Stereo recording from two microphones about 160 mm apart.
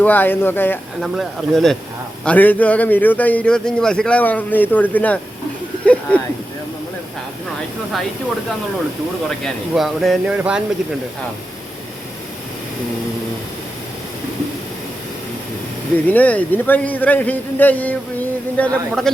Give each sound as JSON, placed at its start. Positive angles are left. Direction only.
{"t": 0.0, "sound": "a man's voice", "side_deg": 10}
{"t": 1.0, "sound": "a man's voice", "side_deg": 0}
{"t": 9.4, "sound": "speech", "side_deg": 0}
{"t": 16.0, "sound": "a man's voice", "side_deg": 10}